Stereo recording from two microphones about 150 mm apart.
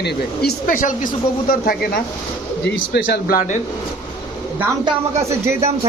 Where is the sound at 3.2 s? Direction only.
75° left (ahead or behind).